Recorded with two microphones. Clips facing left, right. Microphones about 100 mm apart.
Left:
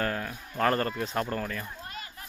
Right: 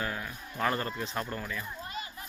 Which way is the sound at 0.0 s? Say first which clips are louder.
Left 5 dB; 50° left (ahead or behind).